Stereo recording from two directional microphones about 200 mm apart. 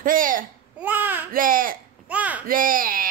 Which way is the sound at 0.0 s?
45° right (ahead or behind).